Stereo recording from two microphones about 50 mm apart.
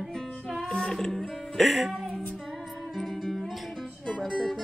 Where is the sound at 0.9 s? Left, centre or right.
Centre.